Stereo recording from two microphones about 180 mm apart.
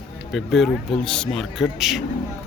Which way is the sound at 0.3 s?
Centre (ahead or behind).